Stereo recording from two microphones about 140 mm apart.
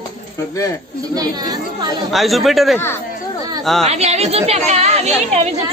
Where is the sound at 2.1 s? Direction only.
Centre (ahead or behind).